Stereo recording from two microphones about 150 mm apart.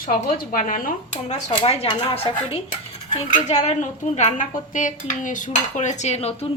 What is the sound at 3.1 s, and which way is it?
Dishes, 50° left (ahead or behind).